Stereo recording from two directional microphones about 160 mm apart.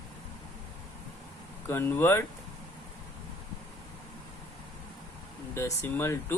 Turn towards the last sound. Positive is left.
turn(degrees=15)  # may be behind; listen again after turning